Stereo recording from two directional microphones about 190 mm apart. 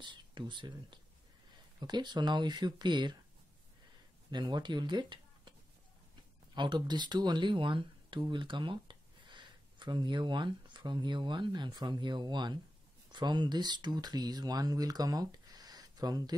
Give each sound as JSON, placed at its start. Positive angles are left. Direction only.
{"t": 0.0, "sound": "speech", "side_deg": -25}
{"t": 4.3, "sound": "speech", "side_deg": -20}
{"t": 6.5, "sound": "speech", "side_deg": -25}